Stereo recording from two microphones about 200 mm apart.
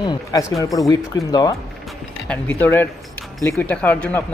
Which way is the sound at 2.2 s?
5° left (ahead or behind).